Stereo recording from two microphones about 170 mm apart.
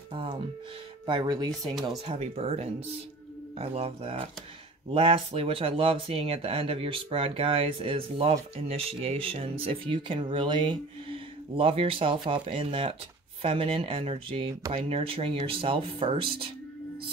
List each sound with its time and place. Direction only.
0.1 s speech: 30° right (ahead or behind)
2.0 s speech: 40° right (ahead or behind)